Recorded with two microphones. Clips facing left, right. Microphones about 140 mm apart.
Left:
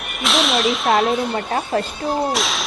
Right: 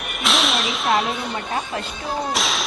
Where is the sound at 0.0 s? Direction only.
Centre (ahead or behind).